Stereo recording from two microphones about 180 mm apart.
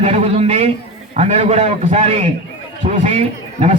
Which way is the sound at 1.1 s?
40° right (ahead or behind).